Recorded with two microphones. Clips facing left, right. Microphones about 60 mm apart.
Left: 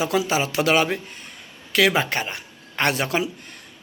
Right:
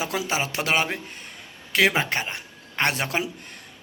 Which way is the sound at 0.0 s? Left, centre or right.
Right.